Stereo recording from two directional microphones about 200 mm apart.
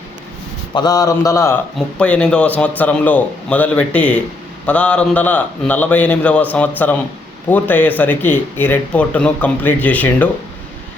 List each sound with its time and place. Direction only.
0.7 s a man's voice: 20° left (ahead or behind)